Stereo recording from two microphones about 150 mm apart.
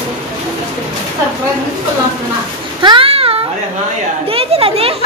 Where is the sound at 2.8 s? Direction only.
35° right (ahead or behind).